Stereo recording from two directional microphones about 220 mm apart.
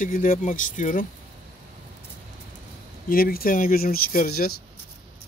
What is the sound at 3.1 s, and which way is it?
Speech, 40° left (ahead or behind).